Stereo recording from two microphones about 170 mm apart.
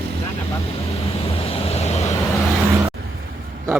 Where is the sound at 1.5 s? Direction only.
35° left (ahead or behind).